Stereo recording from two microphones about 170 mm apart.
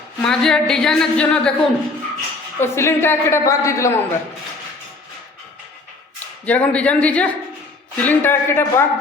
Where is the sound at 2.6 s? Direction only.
15° left (ahead or behind).